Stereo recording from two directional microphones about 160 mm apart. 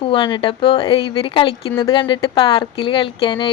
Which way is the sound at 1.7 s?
20° left (ahead or behind).